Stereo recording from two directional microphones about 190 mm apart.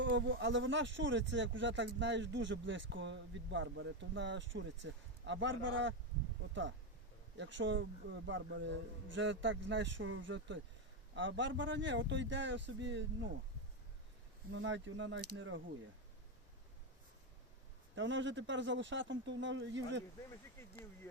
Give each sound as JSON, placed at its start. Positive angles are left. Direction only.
{"t": 0.0, "sound": "speech", "side_deg": -75}
{"t": 14.5, "sound": "speech", "side_deg": -90}
{"t": 17.9, "sound": "speech", "side_deg": -75}